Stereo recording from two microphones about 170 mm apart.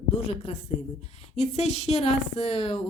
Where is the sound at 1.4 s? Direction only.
40° left (ahead or behind).